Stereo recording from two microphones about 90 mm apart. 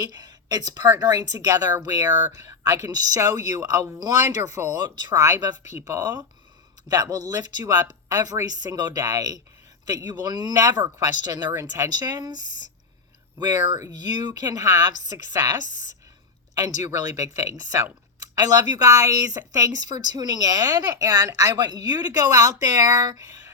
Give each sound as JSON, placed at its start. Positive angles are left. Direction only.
{"t": 0.0, "sound": "speech", "side_deg": -50}
{"t": 5.7, "sound": "speech", "side_deg": -35}
{"t": 13.4, "sound": "speech", "side_deg": -45}
{"t": 16.6, "sound": "speech", "side_deg": -40}